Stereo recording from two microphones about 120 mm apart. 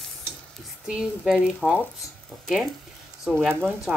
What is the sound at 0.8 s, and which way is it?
Speech, 5° right (ahead or behind).